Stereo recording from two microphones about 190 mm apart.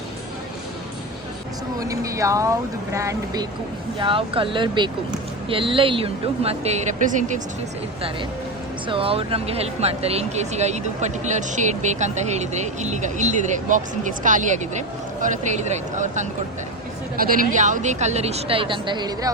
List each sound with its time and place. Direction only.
1.8 s speech: 15° right (ahead or behind)
4.0 s speech: 25° right (ahead or behind)
8.9 s speech: 30° right (ahead or behind)